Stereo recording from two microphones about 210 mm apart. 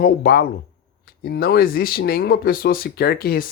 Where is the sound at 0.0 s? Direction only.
45° left (ahead or behind).